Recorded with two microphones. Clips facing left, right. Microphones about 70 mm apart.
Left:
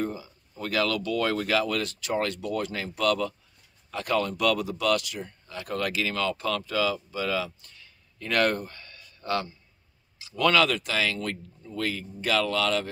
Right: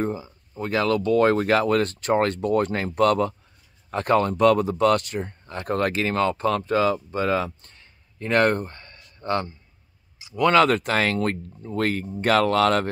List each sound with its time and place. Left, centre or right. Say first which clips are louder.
0.0 s speech: right 4 dB; right
10.1 s a sound: right 3 dB; right
10.5 s speech: right 8 dB; right